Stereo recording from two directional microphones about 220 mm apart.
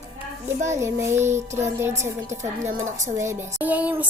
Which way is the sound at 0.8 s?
15° right (ahead or behind).